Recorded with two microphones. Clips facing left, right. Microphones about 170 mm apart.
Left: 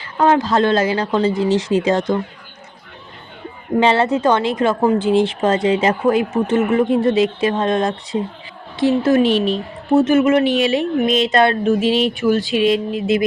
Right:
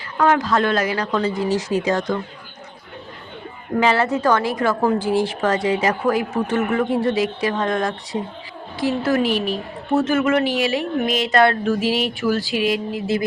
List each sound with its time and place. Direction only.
0.2 s a woman's voice: 25° left (ahead or behind)
3.8 s a woman's voice: 25° left (ahead or behind)